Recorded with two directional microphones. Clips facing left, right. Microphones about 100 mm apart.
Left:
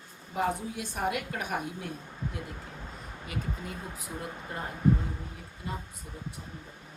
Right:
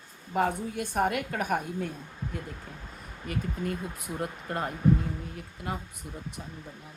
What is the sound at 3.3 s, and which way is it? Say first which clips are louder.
Speech: right 6 dB; 55° right (ahead or behind).